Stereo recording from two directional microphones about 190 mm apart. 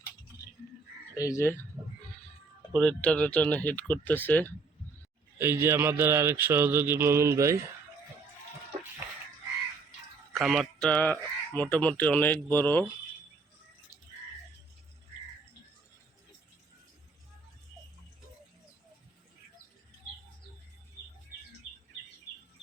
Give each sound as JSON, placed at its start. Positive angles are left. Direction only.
{"t": 1.1, "sound": "speech", "side_deg": 15}
{"t": 2.7, "sound": "speech", "side_deg": 5}
{"t": 5.4, "sound": "mantra", "side_deg": -15}
{"t": 10.3, "sound": "speech", "side_deg": 0}